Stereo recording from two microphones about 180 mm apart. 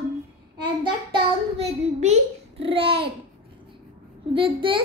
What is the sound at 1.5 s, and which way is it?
Child singing, 35° right (ahead or behind).